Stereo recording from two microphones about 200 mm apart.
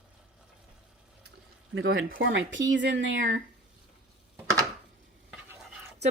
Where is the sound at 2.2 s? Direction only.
65° right (ahead or behind).